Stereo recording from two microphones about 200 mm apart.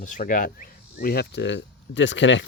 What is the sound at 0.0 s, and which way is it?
Speech, 40° left (ahead or behind).